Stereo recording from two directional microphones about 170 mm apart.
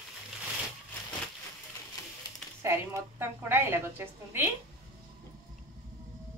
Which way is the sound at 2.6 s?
15° right (ahead or behind).